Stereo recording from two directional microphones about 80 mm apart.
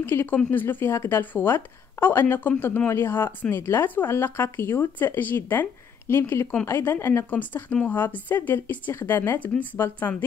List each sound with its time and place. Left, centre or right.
0.0 s speech: left
7.2 s speech: left